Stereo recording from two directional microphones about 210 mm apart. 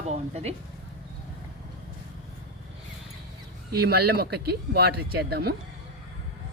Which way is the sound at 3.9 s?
50° right (ahead or behind).